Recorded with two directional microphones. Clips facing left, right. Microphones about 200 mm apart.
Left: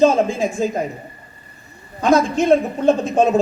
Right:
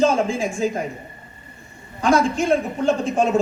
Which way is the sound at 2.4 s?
35° left (ahead or behind).